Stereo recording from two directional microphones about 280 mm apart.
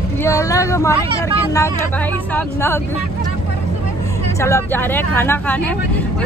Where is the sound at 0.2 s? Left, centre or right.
Centre.